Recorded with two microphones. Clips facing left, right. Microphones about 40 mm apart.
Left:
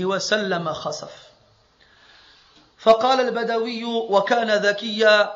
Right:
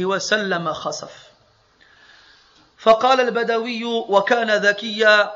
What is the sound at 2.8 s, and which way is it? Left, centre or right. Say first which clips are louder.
A man's voice: right 2 dB; right.